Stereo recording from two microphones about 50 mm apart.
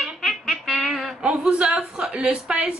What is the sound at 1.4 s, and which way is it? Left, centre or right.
A woman's voice, right.